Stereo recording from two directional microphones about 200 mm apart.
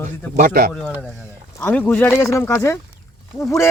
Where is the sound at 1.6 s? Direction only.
10° left (ahead or behind).